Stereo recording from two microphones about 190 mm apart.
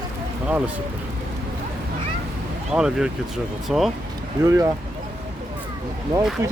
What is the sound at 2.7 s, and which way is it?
Speech, 5° right (ahead or behind).